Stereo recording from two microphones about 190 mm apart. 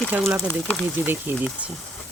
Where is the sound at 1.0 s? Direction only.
10° right (ahead or behind).